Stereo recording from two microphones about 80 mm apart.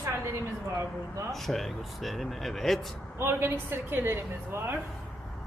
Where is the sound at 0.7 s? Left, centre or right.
Right.